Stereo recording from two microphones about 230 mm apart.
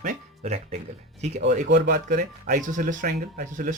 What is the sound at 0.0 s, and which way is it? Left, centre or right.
Music, right.